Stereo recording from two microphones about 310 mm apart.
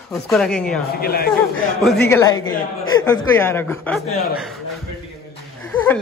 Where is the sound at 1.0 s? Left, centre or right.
Left.